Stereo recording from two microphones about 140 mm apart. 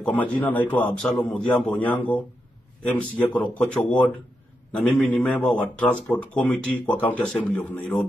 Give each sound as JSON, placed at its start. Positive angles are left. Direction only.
{"t": 0.0, "sound": "speech", "side_deg": 10}